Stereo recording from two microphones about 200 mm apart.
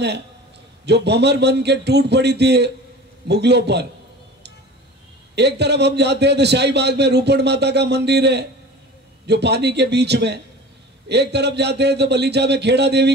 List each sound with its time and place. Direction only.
0.8 s a man's voice: 55° right (ahead or behind)
5.3 s a man's voice: 55° right (ahead or behind)